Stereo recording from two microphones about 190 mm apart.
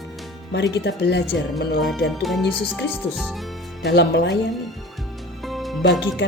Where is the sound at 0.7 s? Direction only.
65° left (ahead or behind).